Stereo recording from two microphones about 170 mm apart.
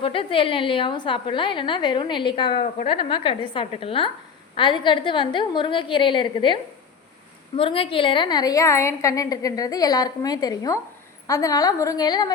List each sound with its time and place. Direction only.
0.0 s a woman's voice: 30° left (ahead or behind)